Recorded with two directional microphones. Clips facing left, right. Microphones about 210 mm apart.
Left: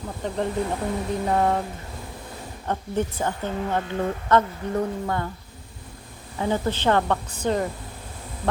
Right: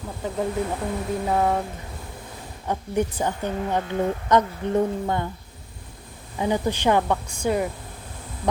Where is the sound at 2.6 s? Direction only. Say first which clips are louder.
Right 2 dB; 15° right (ahead or behind).